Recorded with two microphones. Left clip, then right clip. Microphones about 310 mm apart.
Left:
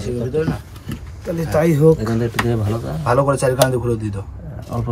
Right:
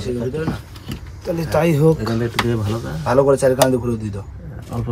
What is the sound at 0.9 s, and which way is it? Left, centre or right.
Speech, right.